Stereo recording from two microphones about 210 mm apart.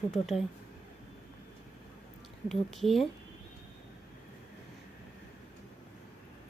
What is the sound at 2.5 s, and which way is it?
Speech, centre (ahead or behind).